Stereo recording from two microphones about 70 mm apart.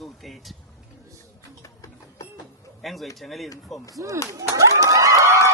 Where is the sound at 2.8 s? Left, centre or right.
Centre.